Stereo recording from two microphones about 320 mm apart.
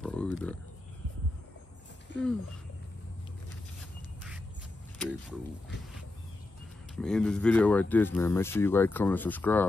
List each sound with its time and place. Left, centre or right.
0.0 s a sound: centre
2.1 s speech: left
7.0 s speech: centre